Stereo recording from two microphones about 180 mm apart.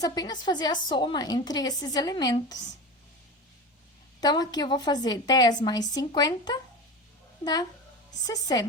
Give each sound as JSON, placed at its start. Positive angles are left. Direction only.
{"t": 0.0, "sound": "a woman's voice", "side_deg": 20}
{"t": 4.2, "sound": "a woman's voice", "side_deg": 20}